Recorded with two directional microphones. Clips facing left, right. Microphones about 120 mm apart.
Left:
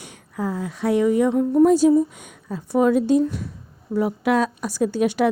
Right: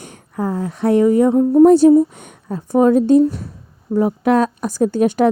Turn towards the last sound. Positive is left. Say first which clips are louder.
# right 5 dB
turn(degrees=-45)  # may be behind; listen again after turning